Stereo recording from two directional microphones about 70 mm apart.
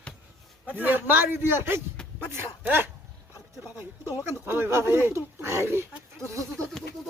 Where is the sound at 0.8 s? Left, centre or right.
Right.